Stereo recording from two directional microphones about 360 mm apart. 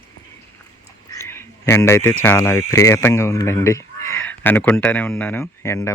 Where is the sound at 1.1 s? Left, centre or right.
Centre.